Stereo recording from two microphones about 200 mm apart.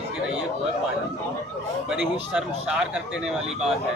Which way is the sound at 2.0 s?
5° right (ahead or behind).